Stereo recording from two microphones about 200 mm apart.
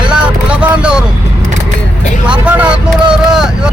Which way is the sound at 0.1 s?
5° right (ahead or behind).